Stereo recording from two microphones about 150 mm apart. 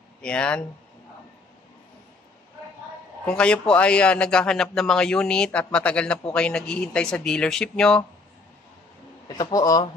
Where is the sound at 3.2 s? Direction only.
5° left (ahead or behind).